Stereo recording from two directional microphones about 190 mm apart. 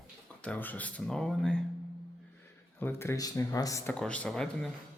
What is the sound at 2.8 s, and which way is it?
Speech, 15° left (ahead or behind).